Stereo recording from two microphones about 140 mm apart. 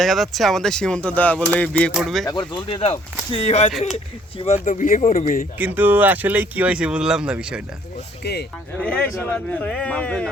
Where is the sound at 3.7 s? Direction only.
Centre (ahead or behind).